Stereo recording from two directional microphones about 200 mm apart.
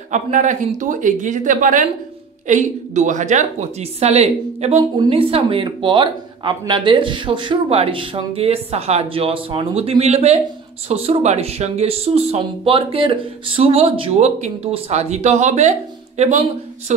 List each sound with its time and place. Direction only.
0.1 s speech: 40° right (ahead or behind)